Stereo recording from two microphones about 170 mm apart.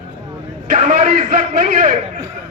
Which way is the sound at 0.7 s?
40° right (ahead or behind).